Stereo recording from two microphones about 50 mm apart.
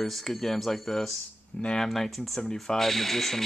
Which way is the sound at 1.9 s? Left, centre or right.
Centre.